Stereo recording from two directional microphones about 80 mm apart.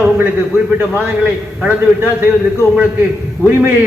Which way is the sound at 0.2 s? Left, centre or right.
Right.